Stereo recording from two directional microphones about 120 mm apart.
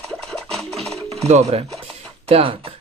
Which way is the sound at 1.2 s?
65° right (ahead or behind).